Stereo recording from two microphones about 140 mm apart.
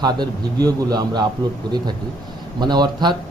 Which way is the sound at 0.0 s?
30° right (ahead or behind).